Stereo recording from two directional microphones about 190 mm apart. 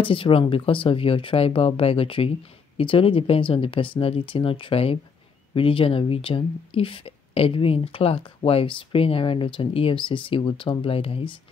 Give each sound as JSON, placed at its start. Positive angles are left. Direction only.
{"t": 0.0, "sound": "speech", "side_deg": 30}